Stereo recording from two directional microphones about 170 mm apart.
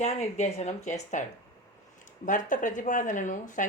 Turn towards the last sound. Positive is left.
turn(degrees=50)  # may be behind; listen again after turning